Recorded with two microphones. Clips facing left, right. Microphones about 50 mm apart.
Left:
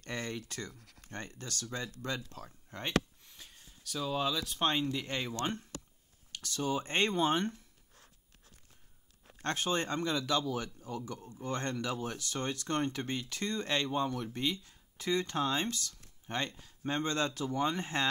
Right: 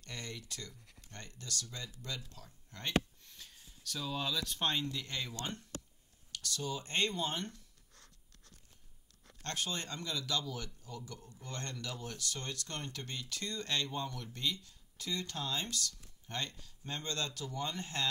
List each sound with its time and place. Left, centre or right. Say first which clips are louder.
0.0 s speech: left 7 dB; left
2.7 s speech: left 5 dB; left
3.3 s a sound: left 1 dB; centre
4.8 s speech: left 5 dB; left
9.4 s speech: left 7 dB; left